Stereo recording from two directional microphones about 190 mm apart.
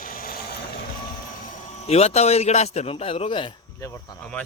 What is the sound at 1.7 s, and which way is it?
A man's voice, 35° left (ahead or behind).